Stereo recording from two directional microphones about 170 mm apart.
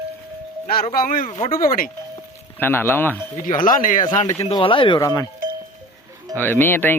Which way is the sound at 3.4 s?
50° left (ahead or behind).